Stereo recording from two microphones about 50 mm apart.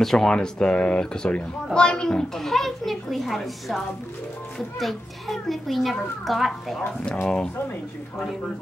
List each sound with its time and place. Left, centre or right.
0.0 s a child's voice: centre
7.2 s speech: left